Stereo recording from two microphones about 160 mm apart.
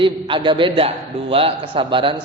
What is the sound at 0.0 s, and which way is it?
A man's voice, 30° right (ahead or behind).